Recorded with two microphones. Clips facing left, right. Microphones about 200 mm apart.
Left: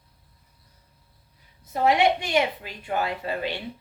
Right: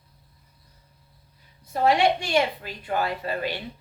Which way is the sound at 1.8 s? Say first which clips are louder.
Even; 20° left (ahead or behind).